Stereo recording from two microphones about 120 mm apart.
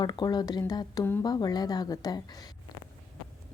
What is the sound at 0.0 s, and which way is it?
Speech, 35° left (ahead or behind).